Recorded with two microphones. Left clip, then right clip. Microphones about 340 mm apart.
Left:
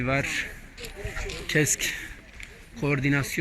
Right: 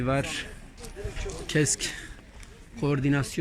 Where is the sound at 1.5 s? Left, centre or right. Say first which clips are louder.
Left 2 dB; centre.